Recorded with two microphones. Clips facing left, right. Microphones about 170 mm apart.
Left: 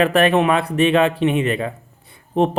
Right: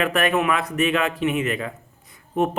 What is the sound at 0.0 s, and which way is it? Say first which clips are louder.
Speech: left 6 dB; 30° left (ahead or behind).